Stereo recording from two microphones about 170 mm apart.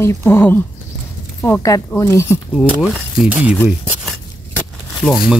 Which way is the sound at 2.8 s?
5° right (ahead or behind).